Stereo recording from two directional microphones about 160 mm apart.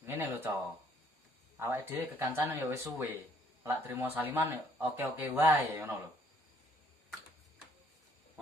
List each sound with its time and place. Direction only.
0.0 s speech: 15° right (ahead or behind)
1.5 s speech: 15° right (ahead or behind)